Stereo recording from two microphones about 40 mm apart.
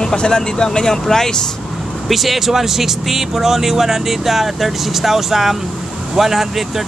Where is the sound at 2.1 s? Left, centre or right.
Centre.